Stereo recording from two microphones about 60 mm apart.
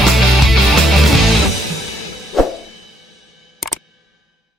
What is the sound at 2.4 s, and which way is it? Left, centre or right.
Music, centre.